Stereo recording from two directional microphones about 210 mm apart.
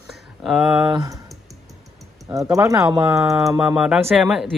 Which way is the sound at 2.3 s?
15° right (ahead or behind).